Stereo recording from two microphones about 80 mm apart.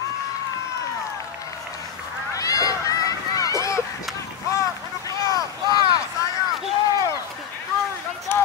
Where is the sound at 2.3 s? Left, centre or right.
Left.